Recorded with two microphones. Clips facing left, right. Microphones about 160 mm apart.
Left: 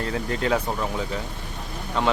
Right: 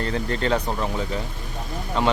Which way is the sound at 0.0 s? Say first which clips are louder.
Right 1 dB; 5° left (ahead or behind).